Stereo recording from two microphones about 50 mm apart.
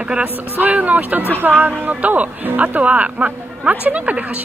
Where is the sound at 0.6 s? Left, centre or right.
Right.